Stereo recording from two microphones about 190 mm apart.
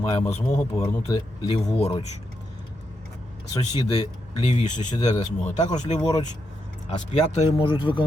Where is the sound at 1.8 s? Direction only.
35° left (ahead or behind).